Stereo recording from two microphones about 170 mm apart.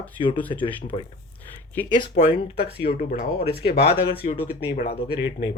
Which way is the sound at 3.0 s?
60° left (ahead or behind).